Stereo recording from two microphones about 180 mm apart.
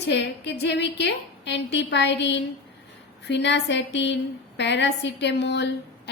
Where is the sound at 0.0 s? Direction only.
75° left (ahead or behind).